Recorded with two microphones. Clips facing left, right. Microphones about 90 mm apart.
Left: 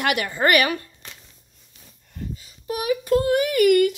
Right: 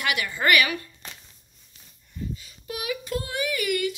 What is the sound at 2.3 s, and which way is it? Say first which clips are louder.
Speech: left 7 dB; 35° left (ahead or behind).